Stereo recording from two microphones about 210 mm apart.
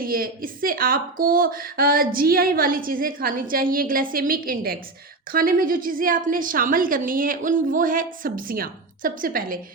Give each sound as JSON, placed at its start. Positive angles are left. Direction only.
{"t": 0.0, "sound": "a woman's voice", "side_deg": -45}